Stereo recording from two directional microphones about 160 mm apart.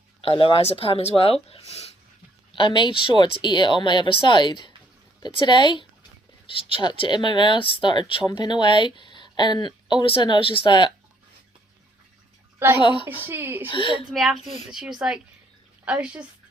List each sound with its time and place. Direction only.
0.2 s speech: 35° left (ahead or behind)
2.6 s speech: 30° left (ahead or behind)
12.8 s speech: 30° left (ahead or behind)
13.1 s a woman's voice: 15° right (ahead or behind)
13.7 s speech: 35° left (ahead or behind)
14.1 s a woman's voice: centre (ahead or behind)